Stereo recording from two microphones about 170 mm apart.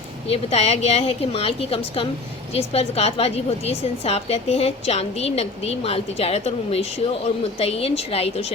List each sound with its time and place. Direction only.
0.3 s a woman's voice: 35° left (ahead or behind)